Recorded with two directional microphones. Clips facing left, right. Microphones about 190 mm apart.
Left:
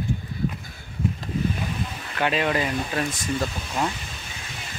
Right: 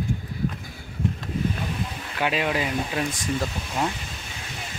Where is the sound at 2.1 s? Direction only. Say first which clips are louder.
Left 1 dB; 5° right (ahead or behind).